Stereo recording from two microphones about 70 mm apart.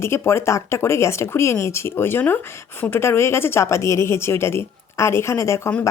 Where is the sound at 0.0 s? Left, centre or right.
Left.